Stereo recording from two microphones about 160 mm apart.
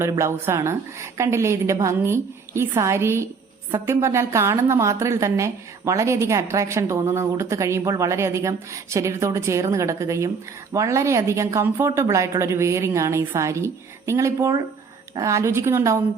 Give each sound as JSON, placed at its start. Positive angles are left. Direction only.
{"t": 0.0, "sound": "a woman's voice", "side_deg": -15}